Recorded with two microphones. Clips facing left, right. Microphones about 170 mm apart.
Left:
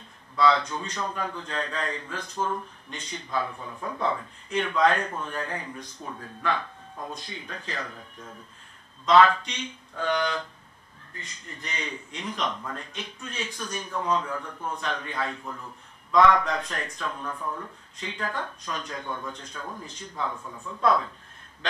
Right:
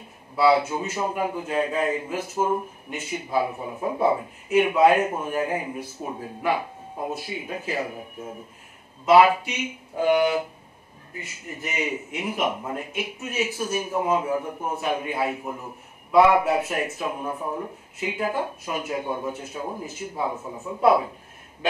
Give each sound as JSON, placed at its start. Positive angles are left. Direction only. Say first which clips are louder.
{"t": 0.4, "sound": "a man's voice", "louder": "right 4 dB", "side_deg": -10}
{"t": 4.0, "sound": "a man's voice", "louder": "right 6 dB", "side_deg": -10}
{"t": 6.0, "sound": "a man's voice", "louder": "right 4 dB", "side_deg": -15}
{"t": 17.3, "sound": "speech", "louder": "right 5 dB", "side_deg": -20}
{"t": 18.0, "sound": "a man's voice", "louder": "right 7 dB", "side_deg": -10}
{"t": 20.3, "sound": "speech", "louder": "right 6 dB", "side_deg": -25}
{"t": 20.8, "sound": "a man's voice", "louder": "right 5 dB", "side_deg": -10}